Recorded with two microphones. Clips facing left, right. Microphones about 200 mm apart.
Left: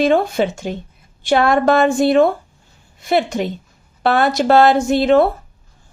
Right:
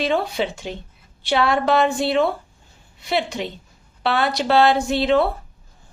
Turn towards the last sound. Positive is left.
turn(degrees=50)  # may be behind; listen again after turning